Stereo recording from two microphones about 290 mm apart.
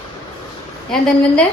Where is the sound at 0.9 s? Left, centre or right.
Centre.